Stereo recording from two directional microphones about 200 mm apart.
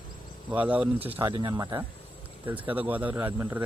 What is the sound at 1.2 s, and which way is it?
Speech, 20° right (ahead or behind).